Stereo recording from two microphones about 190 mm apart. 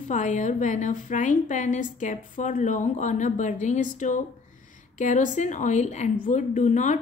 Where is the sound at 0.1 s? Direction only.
40° left (ahead or behind).